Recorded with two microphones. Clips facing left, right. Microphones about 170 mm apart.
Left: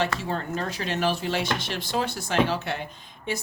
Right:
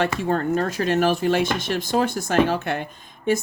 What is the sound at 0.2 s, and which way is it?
A woman's voice, 50° right (ahead or behind).